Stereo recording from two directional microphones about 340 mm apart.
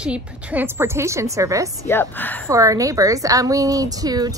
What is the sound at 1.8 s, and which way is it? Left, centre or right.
Speech, centre.